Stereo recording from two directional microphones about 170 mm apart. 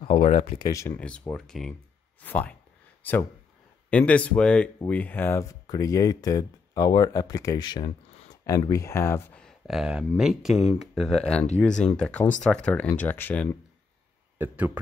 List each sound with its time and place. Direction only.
0.0 s speech: 40° left (ahead or behind)
0.7 s speech: 20° left (ahead or behind)
0.9 s speech: 5° left (ahead or behind)
3.0 s a sound: 10° left (ahead or behind)
3.9 s speech: 5° left (ahead or behind)
9.4 s speech: centre (ahead or behind)
14.4 s speech: 10° right (ahead or behind)